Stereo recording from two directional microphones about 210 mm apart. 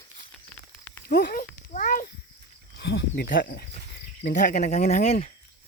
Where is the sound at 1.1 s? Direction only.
45° left (ahead or behind).